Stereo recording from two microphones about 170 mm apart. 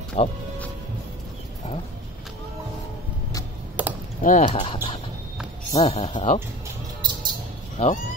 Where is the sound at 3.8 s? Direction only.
10° right (ahead or behind).